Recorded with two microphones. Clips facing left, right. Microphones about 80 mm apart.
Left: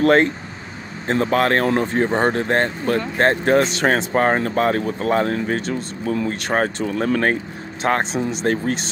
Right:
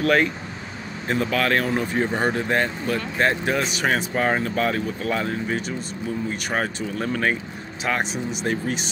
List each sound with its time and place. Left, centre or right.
0.0 s speech: left
2.0 s speech: left
2.3 s speech: left
6.5 s speech: left
8.5 s speech: left